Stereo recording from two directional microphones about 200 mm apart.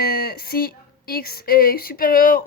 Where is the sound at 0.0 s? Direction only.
50° left (ahead or behind).